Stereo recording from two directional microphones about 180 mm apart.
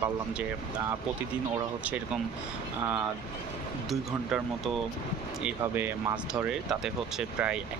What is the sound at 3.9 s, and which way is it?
Speech, centre (ahead or behind).